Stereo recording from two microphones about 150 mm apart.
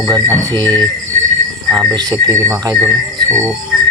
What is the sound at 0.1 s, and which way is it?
Speech, 25° right (ahead or behind).